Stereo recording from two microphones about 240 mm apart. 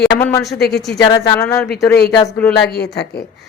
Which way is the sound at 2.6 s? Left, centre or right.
Left.